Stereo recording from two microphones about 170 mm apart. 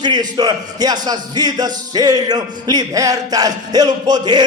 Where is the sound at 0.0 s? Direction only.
25° right (ahead or behind).